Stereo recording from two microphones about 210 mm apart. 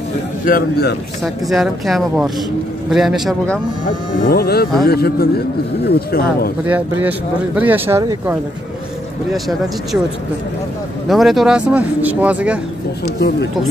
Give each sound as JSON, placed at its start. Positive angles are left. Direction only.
{"t": 0.5, "sound": "speech", "side_deg": 45}
{"t": 1.2, "sound": "speech", "side_deg": 0}
{"t": 3.8, "sound": "speech", "side_deg": 45}
{"t": 6.6, "sound": "speech", "side_deg": -10}
{"t": 11.1, "sound": "speech", "side_deg": 0}